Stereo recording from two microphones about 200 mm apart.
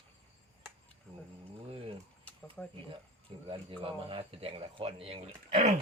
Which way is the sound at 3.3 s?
30° right (ahead or behind).